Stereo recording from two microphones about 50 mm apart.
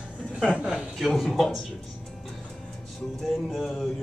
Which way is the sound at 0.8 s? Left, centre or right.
Centre.